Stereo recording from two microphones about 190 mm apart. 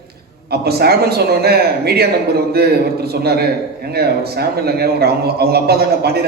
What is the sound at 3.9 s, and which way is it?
A man's voice, 55° right (ahead or behind).